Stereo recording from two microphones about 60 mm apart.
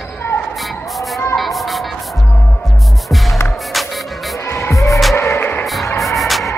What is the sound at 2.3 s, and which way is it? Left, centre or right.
Music, left.